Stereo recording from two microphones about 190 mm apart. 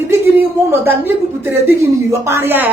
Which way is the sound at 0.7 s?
10° right (ahead or behind).